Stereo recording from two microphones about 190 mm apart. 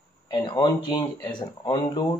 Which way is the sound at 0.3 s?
25° left (ahead or behind).